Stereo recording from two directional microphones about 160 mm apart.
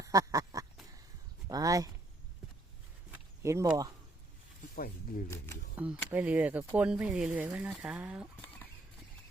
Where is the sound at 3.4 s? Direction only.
20° right (ahead or behind).